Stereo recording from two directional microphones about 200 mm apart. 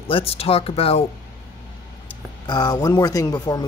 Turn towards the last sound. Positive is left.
turn(degrees=20)  # may be behind; listen again after turning